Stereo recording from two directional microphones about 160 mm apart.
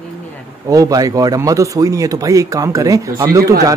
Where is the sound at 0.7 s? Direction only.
20° right (ahead or behind).